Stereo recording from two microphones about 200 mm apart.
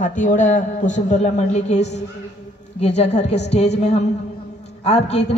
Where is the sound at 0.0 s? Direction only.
40° left (ahead or behind).